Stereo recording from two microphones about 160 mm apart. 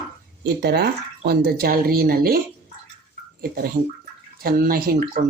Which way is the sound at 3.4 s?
65° right (ahead or behind).